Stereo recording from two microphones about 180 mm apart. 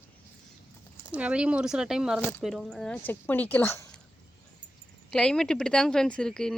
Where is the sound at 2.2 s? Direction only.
10° left (ahead or behind).